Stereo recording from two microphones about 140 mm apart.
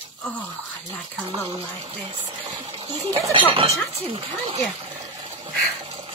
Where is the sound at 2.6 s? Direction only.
40° right (ahead or behind).